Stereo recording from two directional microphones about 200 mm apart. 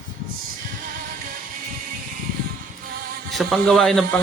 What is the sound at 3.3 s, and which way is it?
Speech, centre (ahead or behind).